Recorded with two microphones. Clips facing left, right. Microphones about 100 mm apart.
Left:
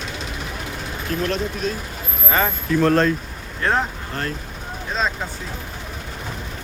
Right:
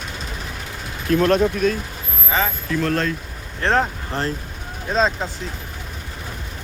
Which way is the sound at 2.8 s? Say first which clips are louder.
Left 6 dB; 30° left (ahead or behind).